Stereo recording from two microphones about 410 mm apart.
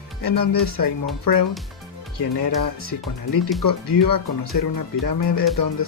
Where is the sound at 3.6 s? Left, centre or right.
Left.